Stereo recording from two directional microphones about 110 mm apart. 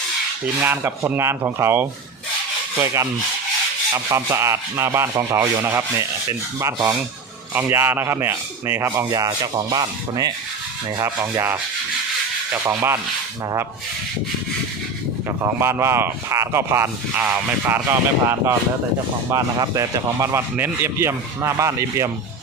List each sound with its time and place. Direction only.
0.4 s speech: 20° right (ahead or behind)
9.0 s rub: 35° right (ahead or behind)
11.0 s speech: 25° right (ahead or behind)
12.6 s speech: 20° right (ahead or behind)
15.4 s speech: 25° right (ahead or behind)